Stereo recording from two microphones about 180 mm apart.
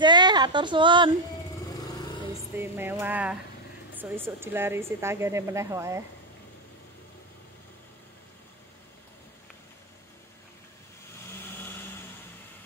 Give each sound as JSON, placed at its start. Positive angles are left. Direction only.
{"t": 0.0, "sound": "speech", "side_deg": -25}
{"t": 2.5, "sound": "speech", "side_deg": -10}
{"t": 11.3, "sound": "vehicle", "side_deg": 10}